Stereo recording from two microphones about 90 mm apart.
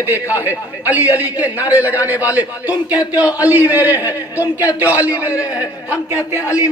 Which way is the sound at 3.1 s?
45° left (ahead or behind).